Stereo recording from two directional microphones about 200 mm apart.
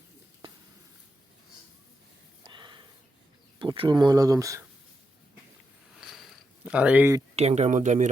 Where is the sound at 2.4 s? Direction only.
20° right (ahead or behind).